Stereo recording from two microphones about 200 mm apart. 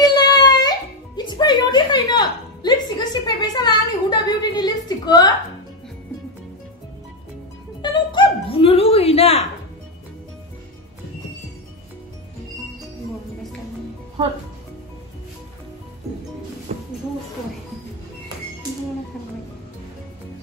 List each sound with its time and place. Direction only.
0.0 s music: 20° left (ahead or behind)
7.8 s a sound: 25° left (ahead or behind)
16.7 s music: 35° right (ahead or behind)